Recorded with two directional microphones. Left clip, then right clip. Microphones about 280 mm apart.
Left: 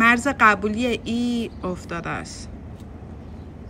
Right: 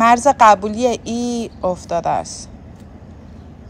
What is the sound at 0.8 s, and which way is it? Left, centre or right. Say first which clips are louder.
Speech: right 6 dB; right.